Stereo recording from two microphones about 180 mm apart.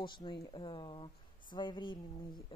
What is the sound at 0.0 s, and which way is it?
A woman's voice, 25° left (ahead or behind).